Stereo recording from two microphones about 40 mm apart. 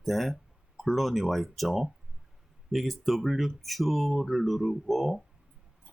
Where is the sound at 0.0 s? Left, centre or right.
Centre.